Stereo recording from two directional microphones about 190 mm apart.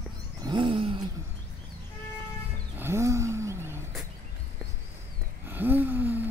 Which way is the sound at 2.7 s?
10° right (ahead or behind).